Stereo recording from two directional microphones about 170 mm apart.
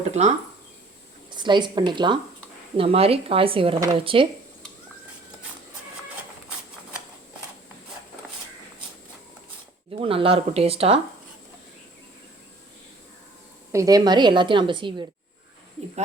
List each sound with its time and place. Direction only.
0.1 s speech: 45° right (ahead or behind)
1.3 s a woman's voice: 25° right (ahead or behind)
10.0 s speech: 30° right (ahead or behind)
13.7 s a woman's voice: 20° right (ahead or behind)